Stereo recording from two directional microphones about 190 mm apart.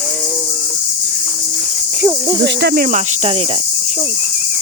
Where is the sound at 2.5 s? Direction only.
60° right (ahead or behind); by 3.6 s 30° right (ahead or behind).